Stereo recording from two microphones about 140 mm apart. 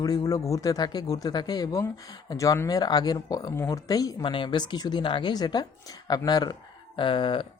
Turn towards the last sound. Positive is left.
turn(degrees=35)  # may be behind; listen again after turning